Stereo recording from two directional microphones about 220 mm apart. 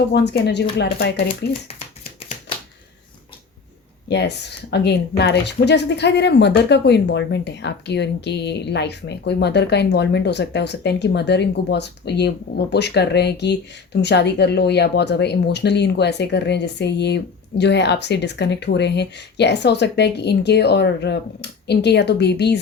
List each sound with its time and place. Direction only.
0.1 s speech: 50° left (ahead or behind)
4.1 s speech: 50° left (ahead or behind)